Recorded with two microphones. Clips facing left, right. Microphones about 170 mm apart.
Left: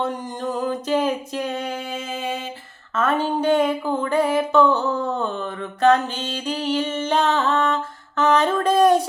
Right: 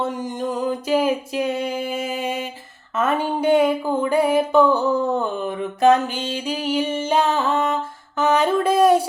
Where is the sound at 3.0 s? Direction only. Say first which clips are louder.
Even; 15° right (ahead or behind).